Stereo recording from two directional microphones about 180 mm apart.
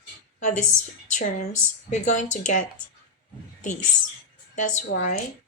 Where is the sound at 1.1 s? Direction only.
45° left (ahead or behind).